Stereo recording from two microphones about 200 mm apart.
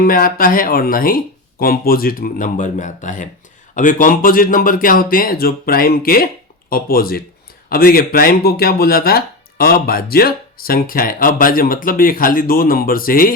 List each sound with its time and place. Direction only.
0.0 s speech: 45° left (ahead or behind)